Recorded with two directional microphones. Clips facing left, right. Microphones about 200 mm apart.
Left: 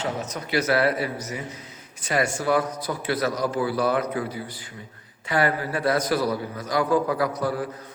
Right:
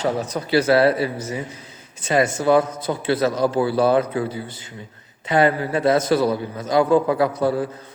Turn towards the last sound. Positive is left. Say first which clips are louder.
# right 5 dB
turn(degrees=-25)  # may be behind; listen again after turning